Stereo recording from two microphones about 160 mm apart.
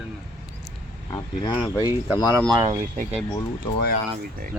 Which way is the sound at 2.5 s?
20° right (ahead or behind).